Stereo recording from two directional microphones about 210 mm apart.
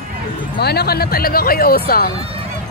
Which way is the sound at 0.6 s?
50° left (ahead or behind).